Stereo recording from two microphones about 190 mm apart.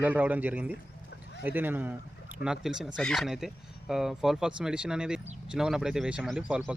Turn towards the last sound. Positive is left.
turn(degrees=-5)  # may be behind; listen again after turning